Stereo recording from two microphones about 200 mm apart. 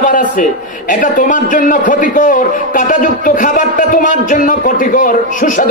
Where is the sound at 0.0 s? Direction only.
40° left (ahead or behind).